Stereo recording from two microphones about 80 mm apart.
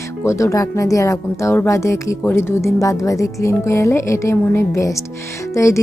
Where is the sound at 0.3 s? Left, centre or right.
Left.